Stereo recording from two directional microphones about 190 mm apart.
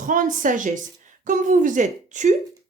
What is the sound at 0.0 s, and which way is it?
Speech, 45° right (ahead or behind).